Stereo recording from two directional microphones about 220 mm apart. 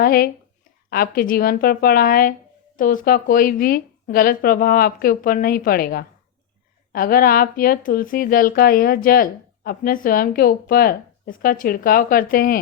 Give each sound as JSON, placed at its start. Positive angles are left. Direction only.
{"t": 0.0, "sound": "speech", "side_deg": 40}